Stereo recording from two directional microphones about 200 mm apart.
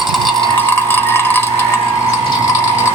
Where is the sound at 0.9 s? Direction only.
10° left (ahead or behind).